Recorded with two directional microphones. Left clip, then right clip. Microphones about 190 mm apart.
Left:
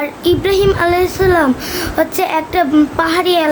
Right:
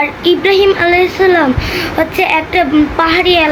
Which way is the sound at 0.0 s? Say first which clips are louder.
Right 4 dB; 15° left (ahead or behind).